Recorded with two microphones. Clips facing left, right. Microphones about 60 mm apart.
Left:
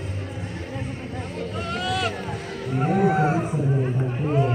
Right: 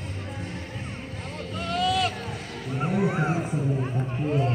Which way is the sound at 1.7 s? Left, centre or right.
Centre.